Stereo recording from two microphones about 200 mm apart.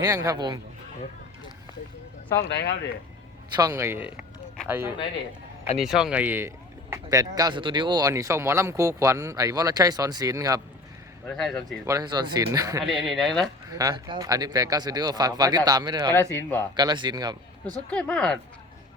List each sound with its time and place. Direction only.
0.0 s speech: 15° right (ahead or behind)
2.5 s speech: 55° left (ahead or behind)
3.5 s speech: 15° right (ahead or behind)
11.3 s speech: centre (ahead or behind)
11.6 s speech: 20° right (ahead or behind)
12.8 s speech: centre (ahead or behind)
13.7 s speech: 15° right (ahead or behind)
16.3 s speech: 10° left (ahead or behind)
16.7 s speech: 20° right (ahead or behind)
17.9 s speech: 5° left (ahead or behind)